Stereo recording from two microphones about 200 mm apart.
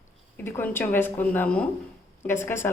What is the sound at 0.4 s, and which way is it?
A woman's voice, 10° left (ahead or behind).